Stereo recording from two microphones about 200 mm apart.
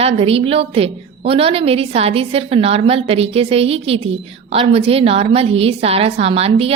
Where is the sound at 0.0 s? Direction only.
30° right (ahead or behind).